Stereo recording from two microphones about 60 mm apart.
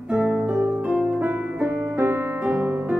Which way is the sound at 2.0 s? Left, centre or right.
Right.